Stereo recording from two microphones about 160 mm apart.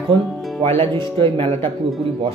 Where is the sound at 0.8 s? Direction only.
30° right (ahead or behind).